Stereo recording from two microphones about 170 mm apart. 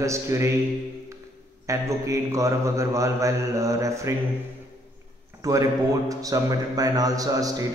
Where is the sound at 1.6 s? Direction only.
20° right (ahead or behind).